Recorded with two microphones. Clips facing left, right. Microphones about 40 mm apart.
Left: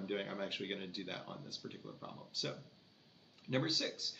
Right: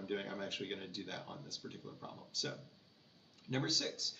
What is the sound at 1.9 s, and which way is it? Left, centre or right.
Speech, centre.